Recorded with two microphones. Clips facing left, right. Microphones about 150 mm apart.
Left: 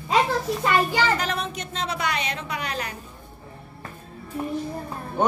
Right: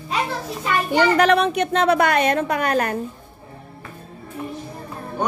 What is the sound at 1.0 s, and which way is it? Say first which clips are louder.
A woman's voice: right 8 dB; 65° right (ahead or behind).